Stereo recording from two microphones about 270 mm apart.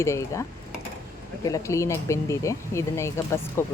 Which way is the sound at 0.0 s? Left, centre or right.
Centre.